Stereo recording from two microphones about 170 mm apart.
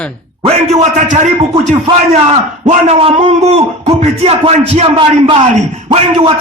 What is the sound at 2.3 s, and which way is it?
A man's voice, 40° right (ahead or behind).